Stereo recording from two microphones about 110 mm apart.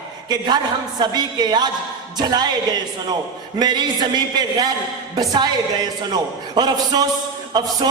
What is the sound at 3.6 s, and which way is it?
A man's voice, 40° right (ahead or behind).